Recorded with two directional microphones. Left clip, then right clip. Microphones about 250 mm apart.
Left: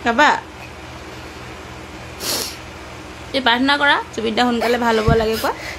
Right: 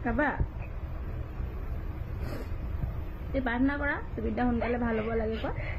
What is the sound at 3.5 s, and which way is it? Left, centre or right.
A woman's voice, left.